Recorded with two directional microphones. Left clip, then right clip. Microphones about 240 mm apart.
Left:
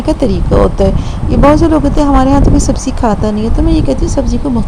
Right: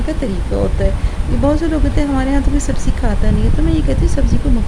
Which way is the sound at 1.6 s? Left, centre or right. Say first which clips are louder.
Left 8 dB; centre.